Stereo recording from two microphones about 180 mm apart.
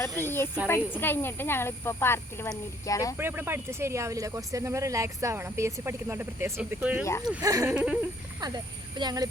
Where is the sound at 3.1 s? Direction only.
10° right (ahead or behind).